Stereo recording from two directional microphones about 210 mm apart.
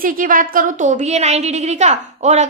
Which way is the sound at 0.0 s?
40° right (ahead or behind).